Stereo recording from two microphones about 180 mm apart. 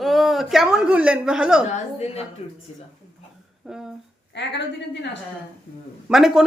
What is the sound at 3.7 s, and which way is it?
Speech, centre (ahead or behind).